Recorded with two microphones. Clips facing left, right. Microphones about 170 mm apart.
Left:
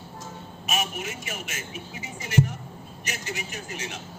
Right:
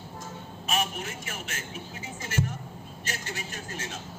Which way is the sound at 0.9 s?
10° left (ahead or behind).